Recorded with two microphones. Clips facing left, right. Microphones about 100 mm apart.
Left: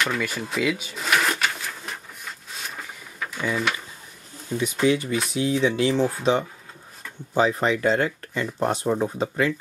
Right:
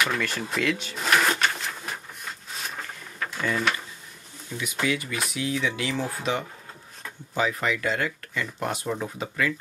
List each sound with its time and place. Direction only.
0.0 s printer: centre (ahead or behind)
4.8 s speech: 30° left (ahead or behind)
7.3 s speech: 30° left (ahead or behind)